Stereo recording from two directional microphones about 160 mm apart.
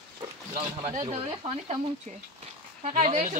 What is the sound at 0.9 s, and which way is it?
Speech, 40° right (ahead or behind).